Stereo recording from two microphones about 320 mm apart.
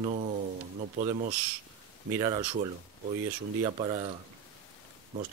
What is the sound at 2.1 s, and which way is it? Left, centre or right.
Speech, centre.